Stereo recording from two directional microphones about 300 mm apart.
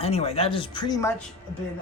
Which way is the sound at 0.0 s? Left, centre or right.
Centre.